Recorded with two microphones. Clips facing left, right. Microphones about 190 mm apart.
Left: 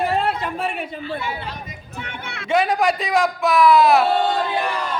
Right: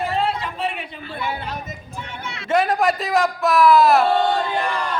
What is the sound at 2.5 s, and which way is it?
Speech, centre (ahead or behind).